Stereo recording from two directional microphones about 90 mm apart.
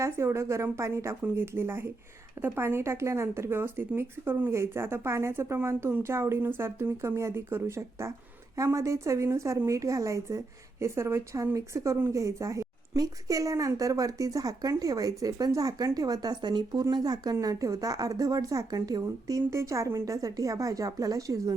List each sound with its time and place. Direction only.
0.0 s a woman's voice: 30° right (ahead or behind)